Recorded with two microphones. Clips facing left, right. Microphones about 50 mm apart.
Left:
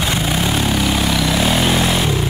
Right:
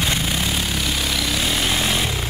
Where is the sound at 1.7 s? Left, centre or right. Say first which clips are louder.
Left 5 dB; left.